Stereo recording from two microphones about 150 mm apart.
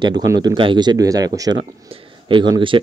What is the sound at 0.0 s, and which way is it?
Speech, 25° right (ahead or behind).